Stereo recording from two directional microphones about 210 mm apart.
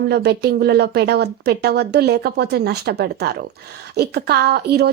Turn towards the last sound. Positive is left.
turn(degrees=-50)  # may be behind; listen again after turning